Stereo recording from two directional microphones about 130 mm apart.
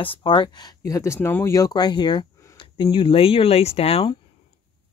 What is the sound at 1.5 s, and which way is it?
Speech, 30° left (ahead or behind).